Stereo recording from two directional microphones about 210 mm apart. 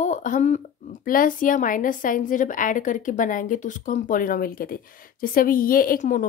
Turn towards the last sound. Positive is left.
turn(degrees=40)  # may be behind; listen again after turning